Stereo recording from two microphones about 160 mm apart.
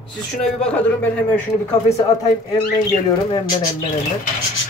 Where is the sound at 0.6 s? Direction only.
5° left (ahead or behind).